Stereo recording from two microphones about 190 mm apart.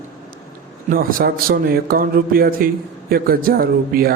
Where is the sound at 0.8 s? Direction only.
50° right (ahead or behind).